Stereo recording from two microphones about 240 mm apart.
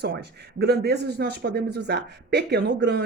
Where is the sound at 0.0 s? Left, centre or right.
Right.